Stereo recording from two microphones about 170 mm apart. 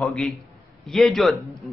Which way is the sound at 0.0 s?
Centre (ahead or behind).